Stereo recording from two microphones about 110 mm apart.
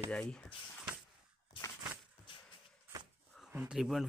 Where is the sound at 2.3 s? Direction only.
50° left (ahead or behind).